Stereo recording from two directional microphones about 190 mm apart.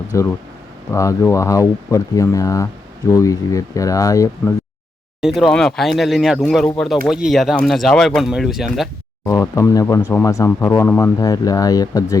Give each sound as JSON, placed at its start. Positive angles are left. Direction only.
{"t": 0.1, "sound": "speech", "side_deg": 15}
{"t": 5.2, "sound": "speech", "side_deg": 0}
{"t": 9.2, "sound": "speech", "side_deg": 15}